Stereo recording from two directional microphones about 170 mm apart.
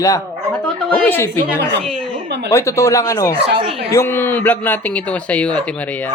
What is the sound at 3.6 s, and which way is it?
Speech, 35° right (ahead or behind).